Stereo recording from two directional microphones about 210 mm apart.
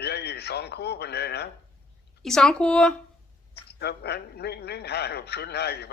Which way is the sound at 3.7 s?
50° left (ahead or behind).